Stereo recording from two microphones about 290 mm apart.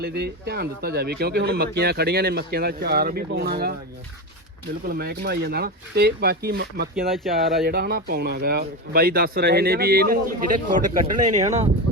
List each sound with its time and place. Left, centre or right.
0.0 s speech: right
4.9 s speech: right